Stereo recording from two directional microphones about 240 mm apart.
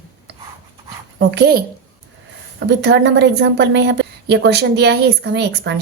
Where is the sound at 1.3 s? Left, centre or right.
Right.